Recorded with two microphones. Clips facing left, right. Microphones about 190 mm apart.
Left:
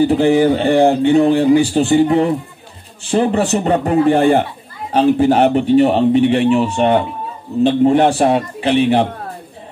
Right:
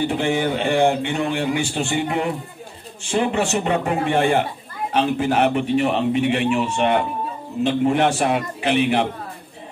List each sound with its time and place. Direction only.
0.0 s a man's voice: 35° left (ahead or behind)